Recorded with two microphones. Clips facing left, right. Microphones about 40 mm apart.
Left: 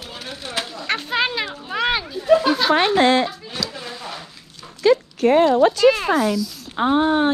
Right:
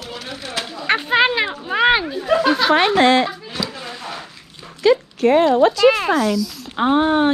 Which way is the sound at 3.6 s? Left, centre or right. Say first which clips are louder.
Right 1 dB; centre.